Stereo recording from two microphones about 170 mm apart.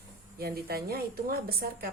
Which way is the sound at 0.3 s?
65° right (ahead or behind).